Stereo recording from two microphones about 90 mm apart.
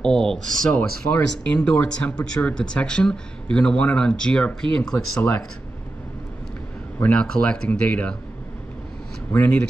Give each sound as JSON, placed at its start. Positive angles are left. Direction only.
{"t": 0.0, "sound": "speech", "side_deg": 5}
{"t": 7.0, "sound": "speech", "side_deg": 10}
{"t": 9.3, "sound": "speech", "side_deg": 20}